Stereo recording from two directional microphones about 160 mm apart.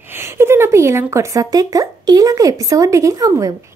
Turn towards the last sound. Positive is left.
turn(degrees=-20)  # may be behind; listen again after turning